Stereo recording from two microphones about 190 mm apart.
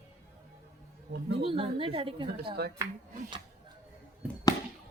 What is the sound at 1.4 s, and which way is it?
A woman's voice, 30° right (ahead or behind).